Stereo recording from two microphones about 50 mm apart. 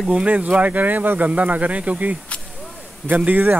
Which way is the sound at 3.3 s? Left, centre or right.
Right.